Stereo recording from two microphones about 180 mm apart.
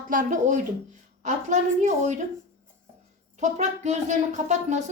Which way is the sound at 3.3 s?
40° right (ahead or behind).